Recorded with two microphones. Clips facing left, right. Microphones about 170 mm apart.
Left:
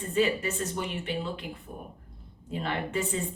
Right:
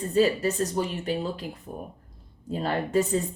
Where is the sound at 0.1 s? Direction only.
35° right (ahead or behind).